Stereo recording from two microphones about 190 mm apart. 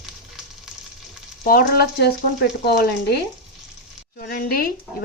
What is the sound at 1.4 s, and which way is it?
A woman's voice, 50° left (ahead or behind).